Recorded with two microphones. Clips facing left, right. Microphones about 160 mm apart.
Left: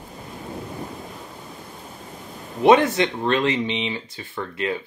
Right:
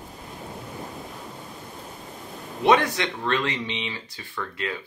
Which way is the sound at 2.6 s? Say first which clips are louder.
Left 5 dB; 25° left (ahead or behind).